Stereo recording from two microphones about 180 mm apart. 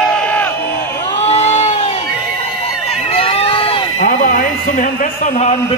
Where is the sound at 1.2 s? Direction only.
35° left (ahead or behind).